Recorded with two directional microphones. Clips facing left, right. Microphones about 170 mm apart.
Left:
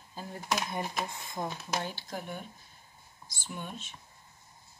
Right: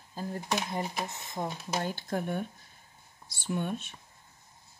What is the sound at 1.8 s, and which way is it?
Speech, 50° right (ahead or behind).